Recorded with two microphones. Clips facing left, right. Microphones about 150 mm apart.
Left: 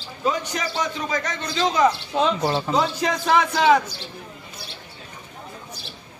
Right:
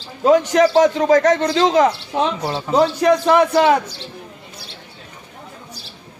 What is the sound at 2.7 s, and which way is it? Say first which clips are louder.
Speech: right 8 dB; 65° right (ahead or behind).